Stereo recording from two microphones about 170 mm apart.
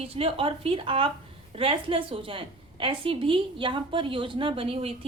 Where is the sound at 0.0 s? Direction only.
35° right (ahead or behind).